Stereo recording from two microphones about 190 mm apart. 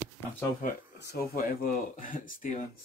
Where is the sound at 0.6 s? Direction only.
50° left (ahead or behind).